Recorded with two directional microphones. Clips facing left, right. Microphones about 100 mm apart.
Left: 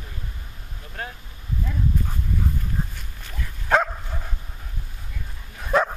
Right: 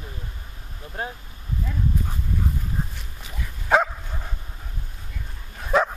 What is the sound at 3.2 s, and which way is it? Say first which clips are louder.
Dog: even; 5° right (ahead or behind).